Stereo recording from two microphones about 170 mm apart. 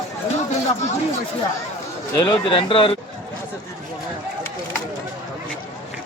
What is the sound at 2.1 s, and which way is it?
Speech, 25° left (ahead or behind).